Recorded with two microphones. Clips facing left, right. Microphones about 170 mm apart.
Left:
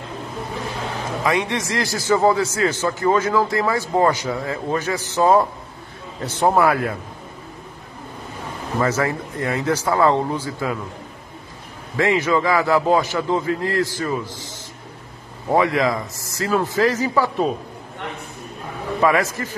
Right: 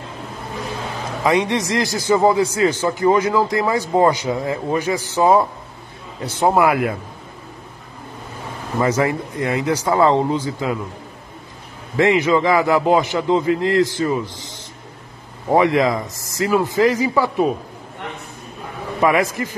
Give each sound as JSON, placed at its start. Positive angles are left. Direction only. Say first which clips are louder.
{"t": 1.2, "sound": "a man's voice", "louder": "right 4 dB", "side_deg": -20}
{"t": 8.7, "sound": "a man's voice", "louder": "right 3 dB", "side_deg": -15}
{"t": 12.0, "sound": "a man's voice", "louder": "right 3 dB", "side_deg": -20}
{"t": 15.5, "sound": "a man's voice", "louder": "right 3 dB", "side_deg": -20}
{"t": 18.9, "sound": "a man's voice", "louder": "right 2 dB", "side_deg": -15}